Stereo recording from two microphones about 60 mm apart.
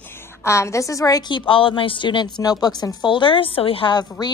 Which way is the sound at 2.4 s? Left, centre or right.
Left.